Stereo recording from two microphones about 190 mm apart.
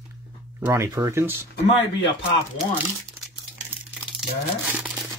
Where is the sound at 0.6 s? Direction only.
15° right (ahead or behind).